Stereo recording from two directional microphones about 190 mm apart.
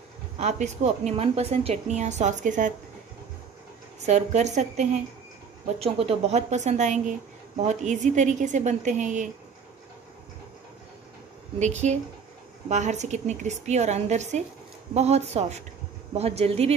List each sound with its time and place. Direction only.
0.4 s a woman's voice: 35° right (ahead or behind)
4.0 s a woman's voice: 35° right (ahead or behind)
11.6 s a woman's voice: 40° right (ahead or behind)